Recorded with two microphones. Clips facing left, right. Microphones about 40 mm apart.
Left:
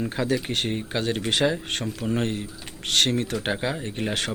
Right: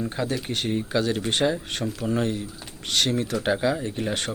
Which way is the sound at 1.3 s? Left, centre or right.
Left.